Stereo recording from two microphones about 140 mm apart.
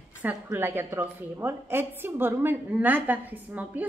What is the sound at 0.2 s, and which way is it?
A woman's voice, 15° right (ahead or behind).